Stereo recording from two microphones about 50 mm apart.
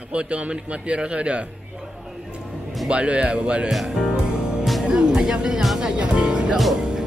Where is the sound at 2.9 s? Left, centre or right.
Right.